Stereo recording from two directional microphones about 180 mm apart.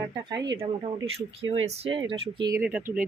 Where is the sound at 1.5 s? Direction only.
35° right (ahead or behind).